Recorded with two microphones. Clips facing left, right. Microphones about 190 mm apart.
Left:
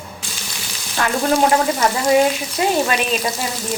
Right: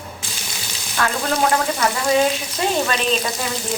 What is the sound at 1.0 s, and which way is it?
Speech, 25° left (ahead or behind).